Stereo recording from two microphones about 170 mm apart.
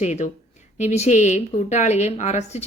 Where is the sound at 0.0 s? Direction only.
45° left (ahead or behind).